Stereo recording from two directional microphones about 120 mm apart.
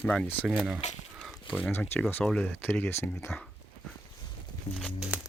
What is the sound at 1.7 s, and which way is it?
Speech, 15° left (ahead or behind).